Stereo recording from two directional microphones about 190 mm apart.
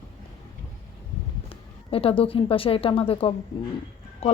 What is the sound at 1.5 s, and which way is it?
A woman's voice, 30° left (ahead or behind).